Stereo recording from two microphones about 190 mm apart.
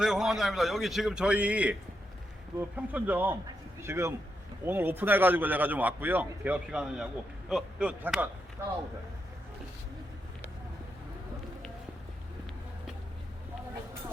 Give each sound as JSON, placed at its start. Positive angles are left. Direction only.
{"t": 0.0, "sound": "a man's voice", "side_deg": -5}